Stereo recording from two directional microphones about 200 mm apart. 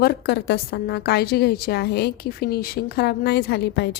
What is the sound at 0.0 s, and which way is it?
A woman's voice, 55° left (ahead or behind).